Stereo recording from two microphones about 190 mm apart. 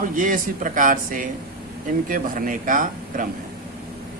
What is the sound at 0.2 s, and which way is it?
Speech, 45° right (ahead or behind).